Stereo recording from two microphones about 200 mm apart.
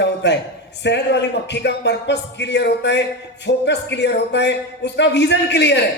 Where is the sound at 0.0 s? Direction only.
60° left (ahead or behind).